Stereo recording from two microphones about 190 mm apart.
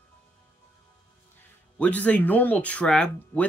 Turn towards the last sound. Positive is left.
turn(degrees=5)  # may be behind; listen again after turning